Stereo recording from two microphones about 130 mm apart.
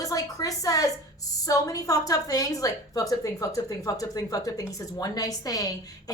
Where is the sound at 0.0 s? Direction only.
25° left (ahead or behind).